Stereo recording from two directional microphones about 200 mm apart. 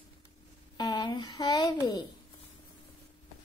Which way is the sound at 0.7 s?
20° left (ahead or behind).